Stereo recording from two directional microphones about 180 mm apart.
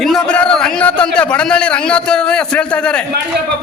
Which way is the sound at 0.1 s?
5° left (ahead or behind).